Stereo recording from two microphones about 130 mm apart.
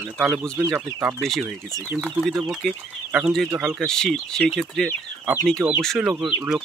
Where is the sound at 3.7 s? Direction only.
5° left (ahead or behind).